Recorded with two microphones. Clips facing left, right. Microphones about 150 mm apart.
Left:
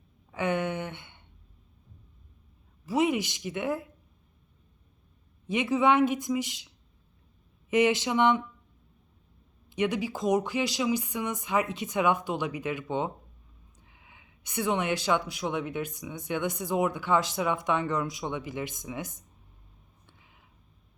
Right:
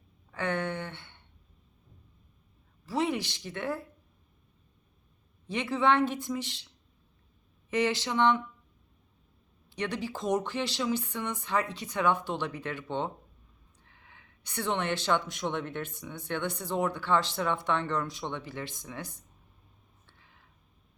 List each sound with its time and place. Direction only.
0.3 s speech: 15° left (ahead or behind)
2.8 s speech: 15° left (ahead or behind)
5.5 s speech: 15° left (ahead or behind)
9.6 s speech: 15° left (ahead or behind)
13.8 s a sound: 10° left (ahead or behind)
15.3 s speech: 5° left (ahead or behind)
20.1 s a sound: 15° left (ahead or behind)